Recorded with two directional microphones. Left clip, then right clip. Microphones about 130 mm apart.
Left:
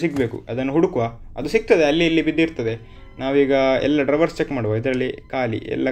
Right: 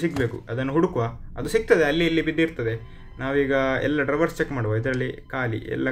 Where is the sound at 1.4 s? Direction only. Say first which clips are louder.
Left 3 dB; 25° left (ahead or behind).